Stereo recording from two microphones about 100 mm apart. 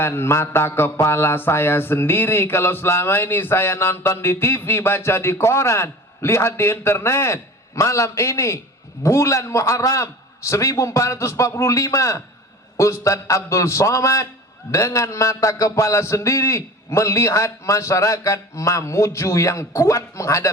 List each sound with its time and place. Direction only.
0.0 s a man's voice: 25° left (ahead or behind)